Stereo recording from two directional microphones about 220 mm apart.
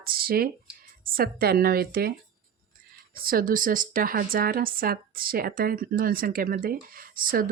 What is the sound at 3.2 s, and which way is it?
Speech, 40° right (ahead or behind).